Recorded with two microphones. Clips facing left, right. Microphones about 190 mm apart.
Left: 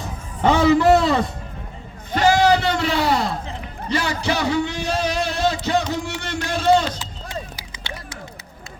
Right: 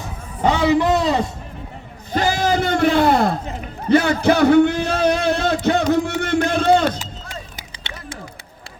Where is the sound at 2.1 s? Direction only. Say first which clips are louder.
Left 3 dB; 50° right (ahead or behind).